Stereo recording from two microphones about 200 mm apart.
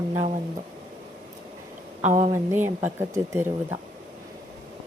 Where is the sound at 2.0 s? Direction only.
35° right (ahead or behind).